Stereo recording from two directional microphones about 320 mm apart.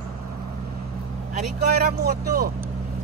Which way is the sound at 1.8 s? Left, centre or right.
Right.